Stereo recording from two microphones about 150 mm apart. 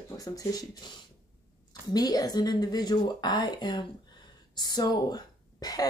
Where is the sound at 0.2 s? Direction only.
25° left (ahead or behind).